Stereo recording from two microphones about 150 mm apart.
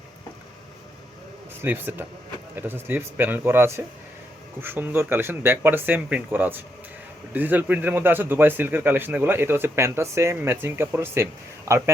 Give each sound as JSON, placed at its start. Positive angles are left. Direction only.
{"t": 1.6, "sound": "speech", "side_deg": -15}